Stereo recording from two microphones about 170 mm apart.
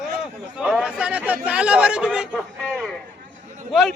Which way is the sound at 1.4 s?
5° right (ahead or behind).